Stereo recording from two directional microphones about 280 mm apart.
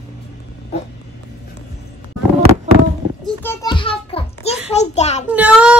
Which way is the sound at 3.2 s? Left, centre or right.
Centre.